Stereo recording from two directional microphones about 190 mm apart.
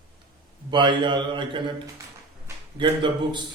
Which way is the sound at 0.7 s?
25° right (ahead or behind).